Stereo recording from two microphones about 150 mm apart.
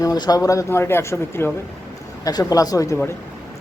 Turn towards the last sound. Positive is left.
turn(degrees=20)  # may be behind; listen again after turning